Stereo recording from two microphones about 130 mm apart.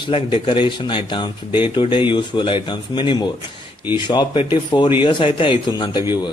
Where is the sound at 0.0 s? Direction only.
45° left (ahead or behind).